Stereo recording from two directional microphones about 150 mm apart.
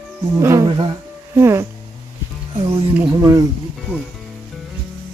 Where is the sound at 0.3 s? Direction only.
20° right (ahead or behind).